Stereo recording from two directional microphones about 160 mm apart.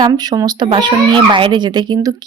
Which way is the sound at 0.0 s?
25° right (ahead or behind).